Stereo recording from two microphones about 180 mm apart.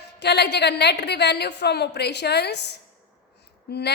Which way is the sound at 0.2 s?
70° left (ahead or behind).